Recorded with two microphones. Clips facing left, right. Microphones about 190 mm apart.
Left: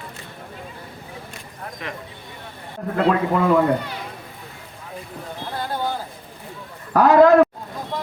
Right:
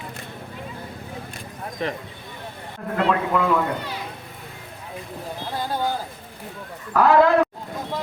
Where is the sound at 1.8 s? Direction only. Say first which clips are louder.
Right 7 dB; 35° right (ahead or behind).